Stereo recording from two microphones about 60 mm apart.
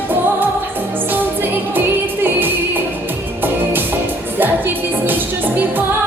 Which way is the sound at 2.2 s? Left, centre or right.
Right.